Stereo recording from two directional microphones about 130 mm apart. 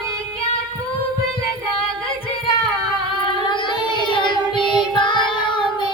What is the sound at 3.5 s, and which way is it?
Child singing, 40° left (ahead or behind).